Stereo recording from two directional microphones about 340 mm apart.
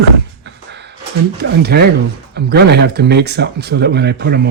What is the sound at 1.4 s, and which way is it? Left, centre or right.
Speech, right.